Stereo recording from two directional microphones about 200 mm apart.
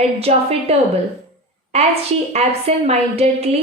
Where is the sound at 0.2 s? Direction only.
30° right (ahead or behind).